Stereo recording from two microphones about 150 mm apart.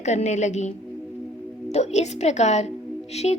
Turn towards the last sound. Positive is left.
turn(degrees=45)  # may be behind; listen again after turning